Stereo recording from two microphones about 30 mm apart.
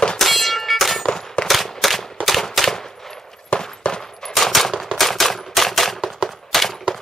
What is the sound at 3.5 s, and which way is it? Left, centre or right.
Machine gun, left.